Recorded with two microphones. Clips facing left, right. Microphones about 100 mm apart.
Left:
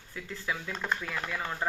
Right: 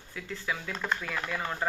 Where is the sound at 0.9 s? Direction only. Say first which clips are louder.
Right 1 dB; 10° left (ahead or behind).